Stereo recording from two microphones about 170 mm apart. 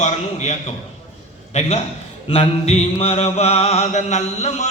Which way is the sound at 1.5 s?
40° left (ahead or behind).